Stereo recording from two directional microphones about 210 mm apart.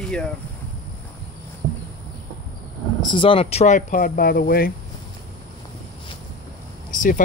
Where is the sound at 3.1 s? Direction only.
25° left (ahead or behind); by 4.7 s 45° left (ahead or behind).